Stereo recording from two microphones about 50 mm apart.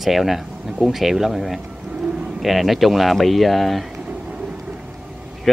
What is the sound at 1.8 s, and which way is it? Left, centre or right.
Bird, centre.